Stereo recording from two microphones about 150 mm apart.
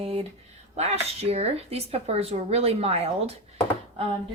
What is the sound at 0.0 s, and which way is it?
Speech, 40° right (ahead or behind).